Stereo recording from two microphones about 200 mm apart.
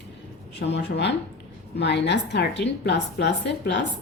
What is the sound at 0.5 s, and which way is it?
A woman's voice, 60° left (ahead or behind).